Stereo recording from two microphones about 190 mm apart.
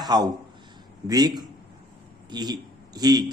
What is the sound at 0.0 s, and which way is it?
Speech, 20° right (ahead or behind).